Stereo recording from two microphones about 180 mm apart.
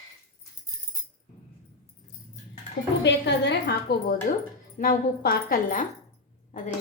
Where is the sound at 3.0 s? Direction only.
75° left (ahead or behind).